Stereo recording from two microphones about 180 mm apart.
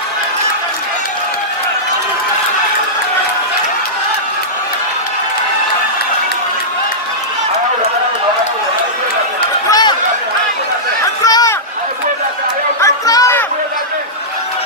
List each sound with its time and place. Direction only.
9.7 s chatter: 20° left (ahead or behind)
11.2 s a sound: 20° left (ahead or behind)
12.8 s chatter: 20° left (ahead or behind)